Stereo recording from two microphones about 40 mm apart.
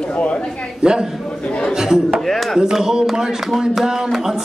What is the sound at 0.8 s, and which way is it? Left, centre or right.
A man's voice, centre.